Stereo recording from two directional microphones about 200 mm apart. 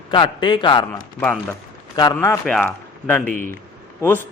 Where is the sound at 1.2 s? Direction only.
10° left (ahead or behind).